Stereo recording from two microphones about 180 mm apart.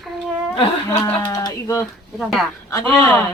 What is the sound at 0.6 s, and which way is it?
Speech, 20° left (ahead or behind).